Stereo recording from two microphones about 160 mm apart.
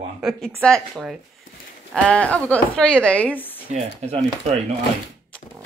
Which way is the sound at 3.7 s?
40° right (ahead or behind).